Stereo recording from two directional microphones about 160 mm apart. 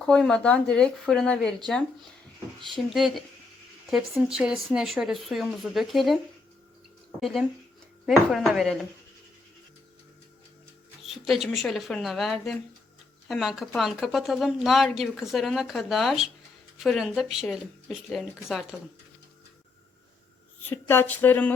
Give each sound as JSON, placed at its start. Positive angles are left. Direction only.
{"t": 0.0, "sound": "speech", "side_deg": 5}
{"t": 7.2, "sound": "speech", "side_deg": 0}
{"t": 11.0, "sound": "music", "side_deg": 0}
{"t": 11.5, "sound": "speech", "side_deg": 0}
{"t": 20.7, "sound": "speech", "side_deg": 15}